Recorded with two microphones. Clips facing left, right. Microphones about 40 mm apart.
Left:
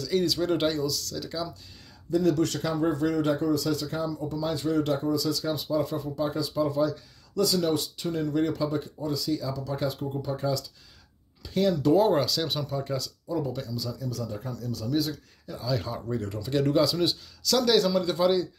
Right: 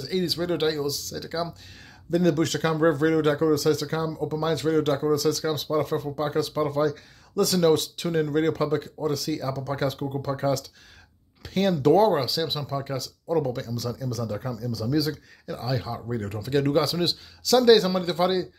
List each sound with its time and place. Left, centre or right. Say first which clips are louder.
0.0 s speech: left 1 dB; right
2.0 s speech: right 2 dB; right
5.4 s speech: right 2 dB; right
8.1 s speech: right 3 dB; right
12.1 s speech: right 1 dB; centre
12.6 s speech: right 1 dB; right
13.3 s speech: right 5 dB; right
13.7 s speech: right 3 dB; right
15.5 s speech: right 5 dB; right
15.8 s speech: right 1 dB; centre
16.3 s speech: right 1 dB; right